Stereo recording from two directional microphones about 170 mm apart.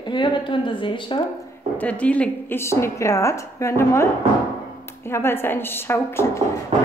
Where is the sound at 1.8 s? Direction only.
10° left (ahead or behind).